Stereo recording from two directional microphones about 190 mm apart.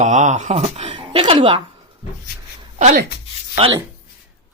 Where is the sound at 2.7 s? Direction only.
40° right (ahead or behind).